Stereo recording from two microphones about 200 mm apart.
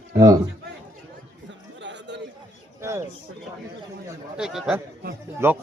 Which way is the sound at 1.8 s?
65° right (ahead or behind).